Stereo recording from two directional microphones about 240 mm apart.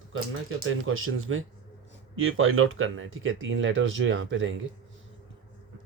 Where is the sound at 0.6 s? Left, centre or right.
Right.